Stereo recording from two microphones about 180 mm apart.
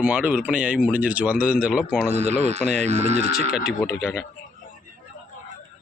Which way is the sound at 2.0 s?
40° right (ahead or behind).